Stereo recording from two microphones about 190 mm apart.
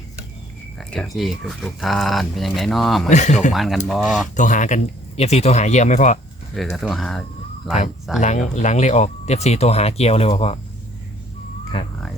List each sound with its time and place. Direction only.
0.8 s speech: centre (ahead or behind)
3.1 s speech: 40° left (ahead or behind)
3.5 s speech: centre (ahead or behind)
4.4 s speech: 40° left (ahead or behind)
6.6 s speech: centre (ahead or behind)
8.2 s speech: 40° left (ahead or behind)